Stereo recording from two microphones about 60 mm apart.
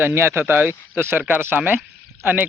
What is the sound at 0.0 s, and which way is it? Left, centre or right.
Speech, right.